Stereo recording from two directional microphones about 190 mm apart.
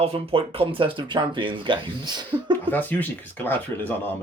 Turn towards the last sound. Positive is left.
turn(degrees=10)  # may be behind; listen again after turning